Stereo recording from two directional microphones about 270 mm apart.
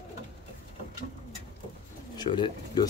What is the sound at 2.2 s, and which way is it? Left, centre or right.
Speech, centre.